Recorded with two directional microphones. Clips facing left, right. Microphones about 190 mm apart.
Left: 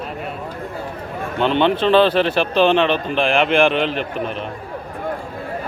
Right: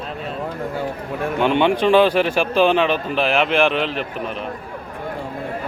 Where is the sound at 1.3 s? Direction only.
10° right (ahead or behind).